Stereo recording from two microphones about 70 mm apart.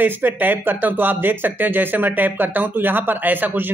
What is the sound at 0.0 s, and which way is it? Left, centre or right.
Speech, right.